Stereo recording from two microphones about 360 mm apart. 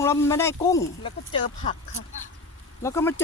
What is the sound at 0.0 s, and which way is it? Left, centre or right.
Speech, centre.